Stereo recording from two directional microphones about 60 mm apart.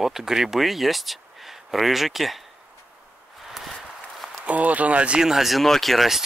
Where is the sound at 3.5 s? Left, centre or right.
Centre.